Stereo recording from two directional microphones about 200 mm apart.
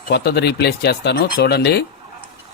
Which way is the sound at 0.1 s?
55° left (ahead or behind).